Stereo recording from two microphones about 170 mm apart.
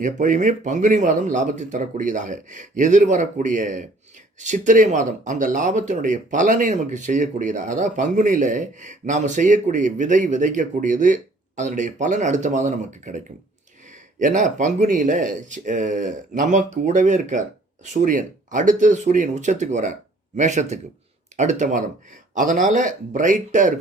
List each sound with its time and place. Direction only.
0.0 s speech: 50° right (ahead or behind)
14.2 s speech: 50° right (ahead or behind)